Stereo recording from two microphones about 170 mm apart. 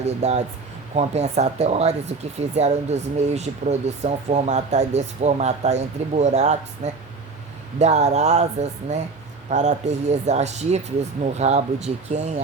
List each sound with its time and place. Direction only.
0.0 s speech: 40° right (ahead or behind)